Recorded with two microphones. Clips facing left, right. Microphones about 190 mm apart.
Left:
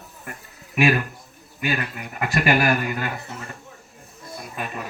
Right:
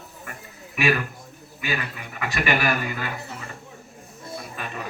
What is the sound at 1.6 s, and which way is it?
Speech, 50° left (ahead or behind).